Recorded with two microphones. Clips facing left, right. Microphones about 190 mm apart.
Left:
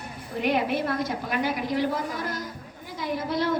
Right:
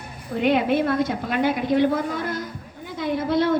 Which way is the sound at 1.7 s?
55° right (ahead or behind).